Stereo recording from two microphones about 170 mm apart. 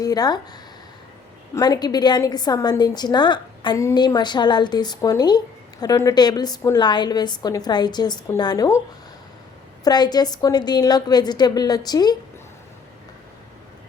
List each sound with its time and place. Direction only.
0.0 s a woman's voice: 20° left (ahead or behind)
9.8 s a woman's voice: 25° left (ahead or behind)